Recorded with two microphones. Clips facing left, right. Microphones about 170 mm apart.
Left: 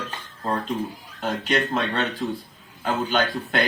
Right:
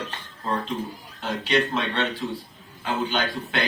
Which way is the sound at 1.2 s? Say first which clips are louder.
Even; 50° left (ahead or behind).